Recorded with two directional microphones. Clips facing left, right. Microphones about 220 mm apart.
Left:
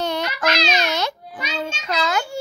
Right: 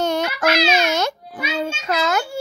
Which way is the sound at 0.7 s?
50° right (ahead or behind).